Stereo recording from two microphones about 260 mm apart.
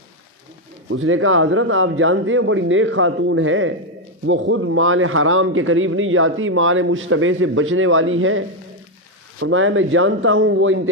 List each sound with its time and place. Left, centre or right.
0.8 s speech: right